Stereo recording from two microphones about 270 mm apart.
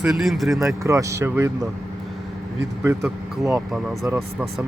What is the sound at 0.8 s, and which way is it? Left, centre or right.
Speech, centre.